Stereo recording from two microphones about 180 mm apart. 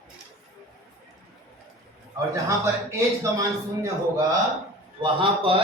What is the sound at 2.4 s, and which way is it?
A man's voice, 15° right (ahead or behind).